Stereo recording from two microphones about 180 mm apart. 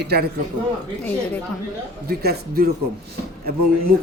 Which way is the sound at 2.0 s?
60° right (ahead or behind).